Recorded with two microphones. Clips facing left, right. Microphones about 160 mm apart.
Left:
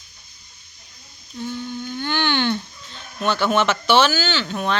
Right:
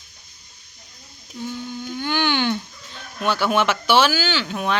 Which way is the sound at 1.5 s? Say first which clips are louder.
Left 1 dB; 5° right (ahead or behind).